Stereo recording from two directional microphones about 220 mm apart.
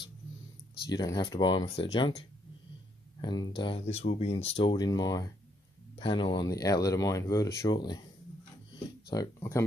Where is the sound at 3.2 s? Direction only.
20° left (ahead or behind).